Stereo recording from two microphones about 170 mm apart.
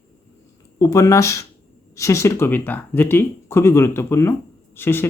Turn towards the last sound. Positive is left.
turn(degrees=15)  # may be behind; listen again after turning